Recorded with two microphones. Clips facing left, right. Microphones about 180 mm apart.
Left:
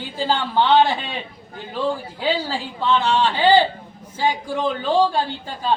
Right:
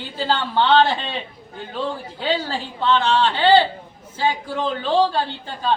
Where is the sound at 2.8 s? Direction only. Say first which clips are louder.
Right 1 dB; 10° left (ahead or behind).